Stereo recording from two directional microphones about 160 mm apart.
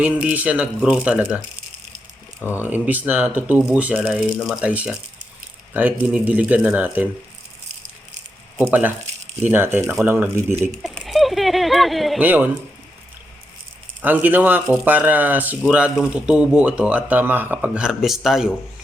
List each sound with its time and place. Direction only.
0.0 s speech: 10° right (ahead or behind)
2.6 s speech: 10° right (ahead or behind)
9.4 s speech: 10° right (ahead or behind)
10.9 s speech: centre (ahead or behind)
12.2 s speech: 10° right (ahead or behind)
14.0 s speech: 10° right (ahead or behind)